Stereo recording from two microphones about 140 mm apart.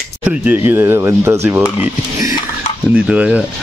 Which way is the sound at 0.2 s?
15° right (ahead or behind).